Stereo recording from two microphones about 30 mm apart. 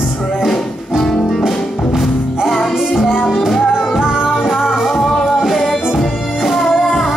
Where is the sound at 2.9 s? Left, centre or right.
Centre.